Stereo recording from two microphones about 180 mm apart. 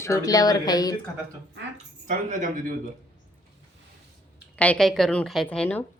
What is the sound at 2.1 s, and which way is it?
Speech, 45° right (ahead or behind).